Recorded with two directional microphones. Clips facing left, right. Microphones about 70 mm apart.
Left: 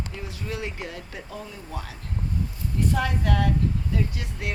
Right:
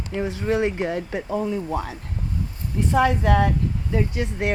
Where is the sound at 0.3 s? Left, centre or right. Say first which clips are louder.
Right 13 dB; right.